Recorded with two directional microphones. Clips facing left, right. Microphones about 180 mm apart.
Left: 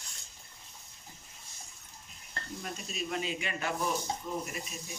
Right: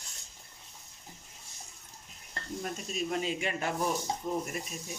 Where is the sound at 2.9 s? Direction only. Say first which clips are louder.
Right 3 dB; 40° right (ahead or behind).